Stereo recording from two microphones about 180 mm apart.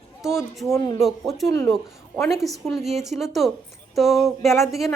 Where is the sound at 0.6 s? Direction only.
20° left (ahead or behind).